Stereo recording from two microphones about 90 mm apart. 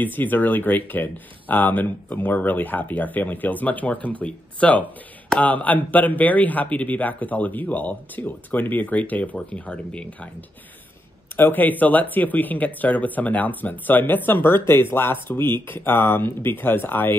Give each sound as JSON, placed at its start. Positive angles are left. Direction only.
{"t": 0.0, "sound": "a man's voice", "side_deg": 20}
{"t": 11.3, "sound": "speech", "side_deg": 20}